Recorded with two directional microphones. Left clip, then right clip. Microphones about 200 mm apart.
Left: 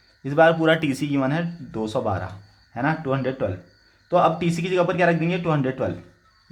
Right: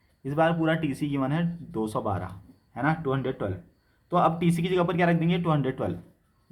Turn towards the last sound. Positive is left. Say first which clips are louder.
# left 4 dB
turn(degrees=20)  # may be behind; listen again after turning